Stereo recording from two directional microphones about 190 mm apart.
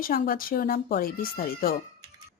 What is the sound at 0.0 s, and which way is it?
Speech, 50° left (ahead or behind).